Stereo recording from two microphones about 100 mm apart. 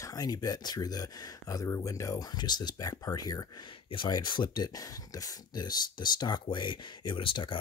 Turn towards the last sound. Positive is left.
turn(degrees=55)  # may be behind; listen again after turning